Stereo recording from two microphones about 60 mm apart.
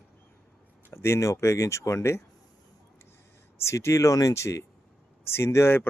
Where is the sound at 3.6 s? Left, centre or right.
Left.